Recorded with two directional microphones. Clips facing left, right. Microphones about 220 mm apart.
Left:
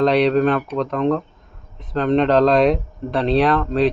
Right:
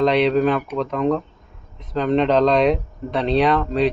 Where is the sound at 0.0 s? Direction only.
Centre (ahead or behind).